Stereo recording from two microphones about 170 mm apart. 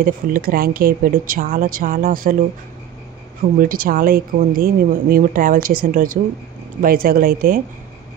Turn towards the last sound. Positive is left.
turn(degrees=-60)  # may be behind; listen again after turning